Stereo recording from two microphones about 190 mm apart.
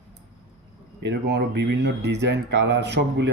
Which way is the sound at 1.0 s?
65° right (ahead or behind).